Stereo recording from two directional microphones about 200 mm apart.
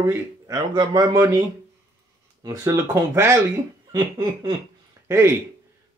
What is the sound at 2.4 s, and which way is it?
Speech, 15° right (ahead or behind).